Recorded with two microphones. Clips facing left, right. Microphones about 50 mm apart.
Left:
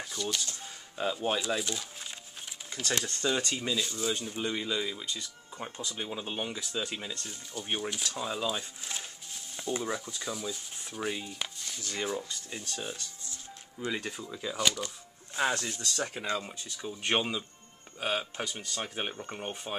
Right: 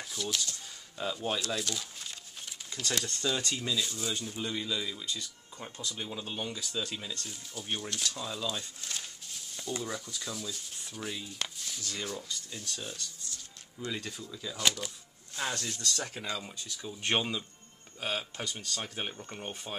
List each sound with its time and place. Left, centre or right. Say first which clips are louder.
0.0 s a sound: left 1 dB; centre
0.9 s speech: left 3 dB; centre
4.4 s speech: left 1 dB; centre
10.4 s rub: left 3 dB; centre
11.0 s speech: left 4 dB; centre
11.8 s speech: left 5 dB; centre
14.6 s speech: left 1 dB; centre
15.3 s speech: left 5 dB; centre
17.0 s speech: left 1 dB; centre